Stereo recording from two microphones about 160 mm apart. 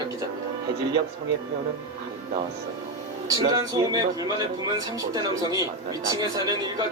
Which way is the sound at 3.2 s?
20° right (ahead or behind).